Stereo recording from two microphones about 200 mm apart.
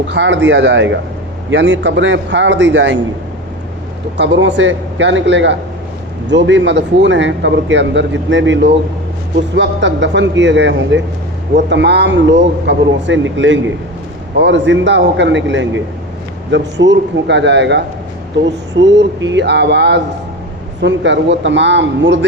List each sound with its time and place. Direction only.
0.1 s speech: 60° right (ahead or behind)
4.2 s speech: 65° right (ahead or behind)